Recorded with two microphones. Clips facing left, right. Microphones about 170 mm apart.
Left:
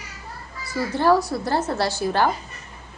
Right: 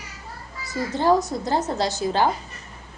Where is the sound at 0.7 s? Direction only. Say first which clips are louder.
Left 1 dB; 20° right (ahead or behind).